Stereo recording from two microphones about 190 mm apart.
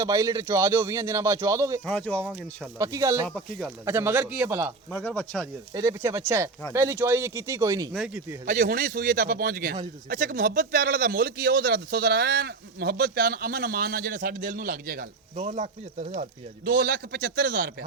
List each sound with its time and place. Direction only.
0.0 s a man's voice: 20° right (ahead or behind)
1.8 s speech: 5° left (ahead or behind)
2.7 s a man's voice: 15° right (ahead or behind)
3.2 s speech: 5° left (ahead or behind)
3.8 s a man's voice: 15° right (ahead or behind)
5.0 s speech: 5° left (ahead or behind)
5.7 s a man's voice: 15° right (ahead or behind)
7.9 s speech: 5° right (ahead or behind)
8.4 s speech: 45° right (ahead or behind)
15.4 s speech: 35° right (ahead or behind)
16.6 s speech: 55° right (ahead or behind)